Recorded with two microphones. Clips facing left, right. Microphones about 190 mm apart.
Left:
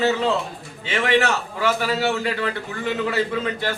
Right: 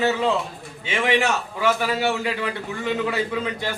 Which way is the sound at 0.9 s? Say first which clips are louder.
Left 1 dB; 15° right (ahead or behind).